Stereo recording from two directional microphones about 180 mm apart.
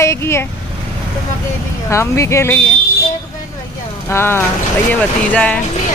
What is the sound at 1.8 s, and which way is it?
Speech, 15° left (ahead or behind).